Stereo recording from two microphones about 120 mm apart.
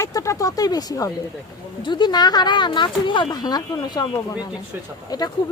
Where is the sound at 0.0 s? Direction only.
25° left (ahead or behind).